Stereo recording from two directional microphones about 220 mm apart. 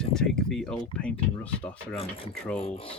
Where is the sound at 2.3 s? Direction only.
Centre (ahead or behind).